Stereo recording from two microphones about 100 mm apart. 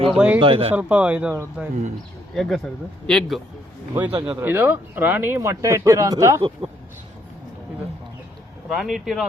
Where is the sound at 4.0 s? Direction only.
15° right (ahead or behind).